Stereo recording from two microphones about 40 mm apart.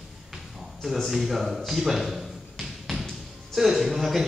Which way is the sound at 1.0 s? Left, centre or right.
Centre.